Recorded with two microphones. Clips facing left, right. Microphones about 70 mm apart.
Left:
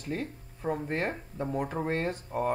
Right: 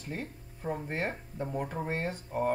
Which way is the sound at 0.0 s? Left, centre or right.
Left.